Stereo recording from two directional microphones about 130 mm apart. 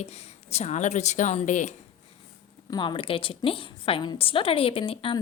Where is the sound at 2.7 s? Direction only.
35° left (ahead or behind).